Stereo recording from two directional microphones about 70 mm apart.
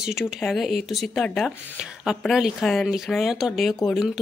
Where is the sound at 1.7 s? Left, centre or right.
Centre.